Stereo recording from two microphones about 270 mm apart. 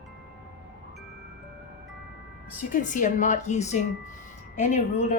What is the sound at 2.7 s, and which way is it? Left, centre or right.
A woman's voice, left.